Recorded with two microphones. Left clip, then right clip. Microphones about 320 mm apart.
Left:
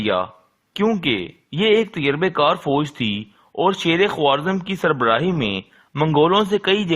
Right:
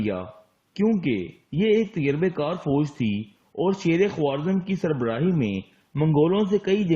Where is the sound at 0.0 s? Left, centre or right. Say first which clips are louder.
Left 9 dB; left.